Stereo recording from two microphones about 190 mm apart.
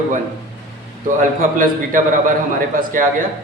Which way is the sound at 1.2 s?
45° right (ahead or behind).